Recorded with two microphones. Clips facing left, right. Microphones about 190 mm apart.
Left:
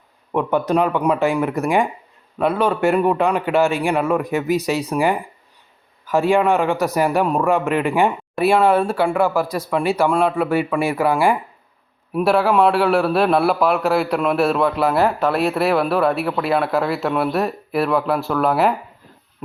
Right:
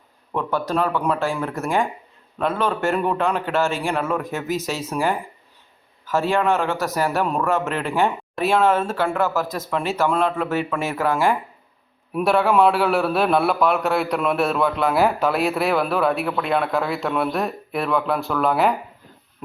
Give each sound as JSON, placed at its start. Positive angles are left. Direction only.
{"t": 0.3, "sound": "a man's voice", "side_deg": 20}
{"t": 12.1, "sound": "a man's voice", "side_deg": 0}
{"t": 19.4, "sound": "pig", "side_deg": 0}